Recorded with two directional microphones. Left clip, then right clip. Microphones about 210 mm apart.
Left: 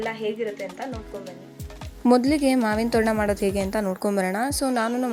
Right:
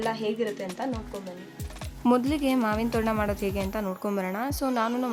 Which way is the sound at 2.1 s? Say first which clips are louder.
Left 6 dB; 15° left (ahead or behind).